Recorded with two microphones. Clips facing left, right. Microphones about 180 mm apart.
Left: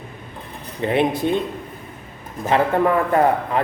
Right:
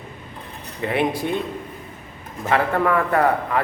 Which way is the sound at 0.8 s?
25° left (ahead or behind).